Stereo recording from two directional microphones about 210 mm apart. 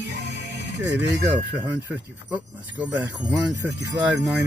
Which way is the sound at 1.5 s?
10° right (ahead or behind).